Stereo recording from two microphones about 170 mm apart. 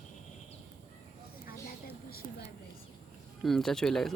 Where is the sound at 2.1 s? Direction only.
60° left (ahead or behind).